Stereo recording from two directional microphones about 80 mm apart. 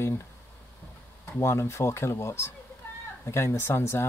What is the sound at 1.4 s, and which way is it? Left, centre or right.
Speech, left.